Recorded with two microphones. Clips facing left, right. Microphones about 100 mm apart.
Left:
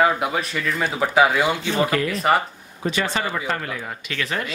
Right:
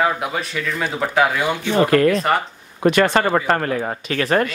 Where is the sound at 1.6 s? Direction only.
55° right (ahead or behind).